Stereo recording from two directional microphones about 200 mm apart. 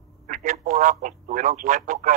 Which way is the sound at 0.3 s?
40° right (ahead or behind).